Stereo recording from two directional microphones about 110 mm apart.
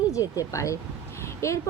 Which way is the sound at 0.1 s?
30° left (ahead or behind).